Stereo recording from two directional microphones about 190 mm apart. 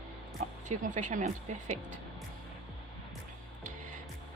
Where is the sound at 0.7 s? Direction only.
40° right (ahead or behind).